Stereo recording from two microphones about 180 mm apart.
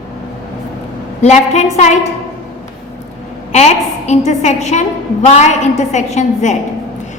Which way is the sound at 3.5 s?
40° left (ahead or behind).